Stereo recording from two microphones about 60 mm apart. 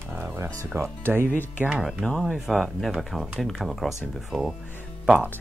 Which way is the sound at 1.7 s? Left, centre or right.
Centre.